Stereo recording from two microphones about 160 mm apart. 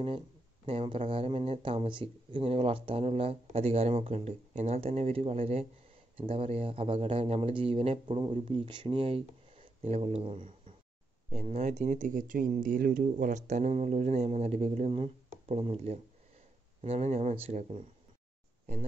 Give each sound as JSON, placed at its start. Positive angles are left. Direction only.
{"t": 0.7, "sound": "speech", "side_deg": -35}